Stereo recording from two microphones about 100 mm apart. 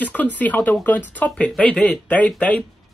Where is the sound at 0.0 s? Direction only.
15° left (ahead or behind).